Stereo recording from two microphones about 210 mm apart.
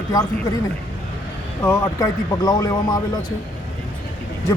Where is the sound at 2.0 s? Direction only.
20° left (ahead or behind).